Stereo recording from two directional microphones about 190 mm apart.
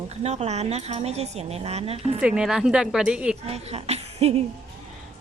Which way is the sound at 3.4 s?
35° right (ahead or behind).